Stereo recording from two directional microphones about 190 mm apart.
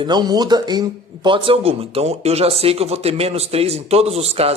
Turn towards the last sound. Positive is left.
turn(degrees=-35)  # may be behind; listen again after turning